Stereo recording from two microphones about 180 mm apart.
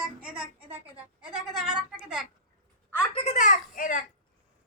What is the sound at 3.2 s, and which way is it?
Speech, 45° left (ahead or behind).